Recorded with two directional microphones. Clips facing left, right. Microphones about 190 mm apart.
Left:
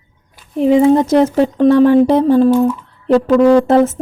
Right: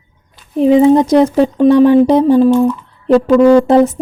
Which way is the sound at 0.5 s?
20° right (ahead or behind).